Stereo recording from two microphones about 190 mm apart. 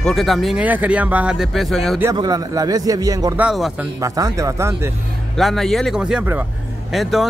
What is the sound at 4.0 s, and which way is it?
Speech, 15° right (ahead or behind).